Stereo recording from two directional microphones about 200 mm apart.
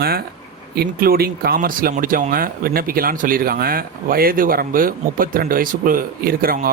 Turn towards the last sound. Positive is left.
turn(degrees=-45)  # may be behind; listen again after turning